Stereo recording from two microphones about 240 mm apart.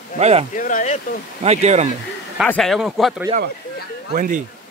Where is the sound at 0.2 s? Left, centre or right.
Right.